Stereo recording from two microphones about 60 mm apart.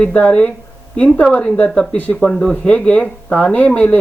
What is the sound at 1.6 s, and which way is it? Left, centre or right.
Speech, centre.